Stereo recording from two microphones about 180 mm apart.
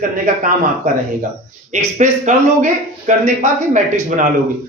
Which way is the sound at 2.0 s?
45° right (ahead or behind).